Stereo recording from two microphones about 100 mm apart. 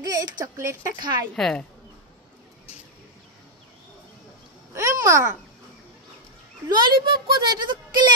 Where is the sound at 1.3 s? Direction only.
5° left (ahead or behind).